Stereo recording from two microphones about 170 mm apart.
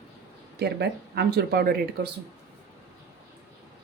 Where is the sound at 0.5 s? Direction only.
75° right (ahead or behind).